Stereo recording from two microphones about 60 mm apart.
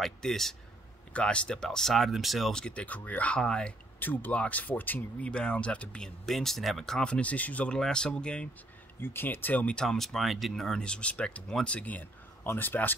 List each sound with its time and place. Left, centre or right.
0.0 s a man's voice: centre
1.1 s speech: centre
2.5 s speech: centre
3.3 s speech: centre
4.0 s speech: left
5.2 s speech: centre
9.0 s speech: left
9.8 s speech: centre; by 12.9 s left